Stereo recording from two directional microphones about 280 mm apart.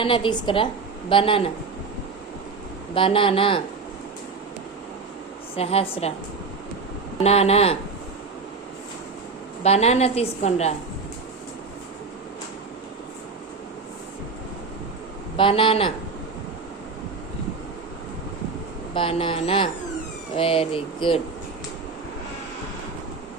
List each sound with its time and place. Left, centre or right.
0.0 s a woman's voice: centre
2.9 s a woman's voice: centre
5.5 s a woman's voice: left
7.2 s a woman's voice: left
9.6 s a woman's voice: left
15.4 s a woman's voice: centre
18.9 s a woman's voice: centre